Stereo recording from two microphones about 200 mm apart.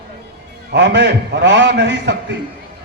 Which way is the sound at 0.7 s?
60° right (ahead or behind).